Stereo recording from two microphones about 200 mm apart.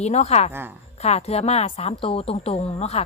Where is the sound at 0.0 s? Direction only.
35° left (ahead or behind).